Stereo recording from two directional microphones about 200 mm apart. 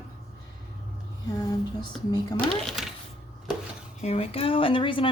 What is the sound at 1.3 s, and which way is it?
Speech, 20° left (ahead or behind).